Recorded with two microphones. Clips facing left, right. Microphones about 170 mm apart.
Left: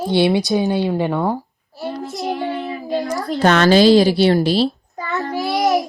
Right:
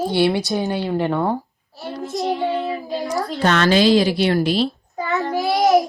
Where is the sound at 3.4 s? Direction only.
40° left (ahead or behind).